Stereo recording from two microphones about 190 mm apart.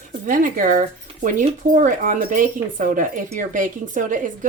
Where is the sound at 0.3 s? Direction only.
45° right (ahead or behind).